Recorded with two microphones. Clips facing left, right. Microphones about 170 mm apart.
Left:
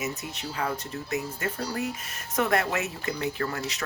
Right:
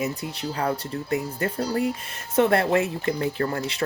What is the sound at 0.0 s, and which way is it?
Speech, 30° right (ahead or behind).